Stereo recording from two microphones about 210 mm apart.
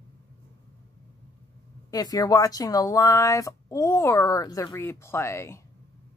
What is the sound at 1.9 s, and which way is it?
Speech, 15° left (ahead or behind).